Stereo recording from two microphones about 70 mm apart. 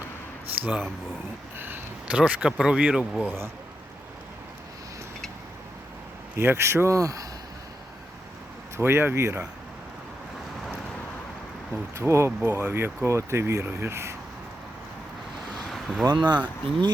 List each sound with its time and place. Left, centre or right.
0.6 s speech: right
1.5 s a sound: right
2.0 s speech: centre
6.3 s speech: right
8.8 s speech: right
11.9 s speech: right
15.7 s vehicle: centre
16.0 s speech: right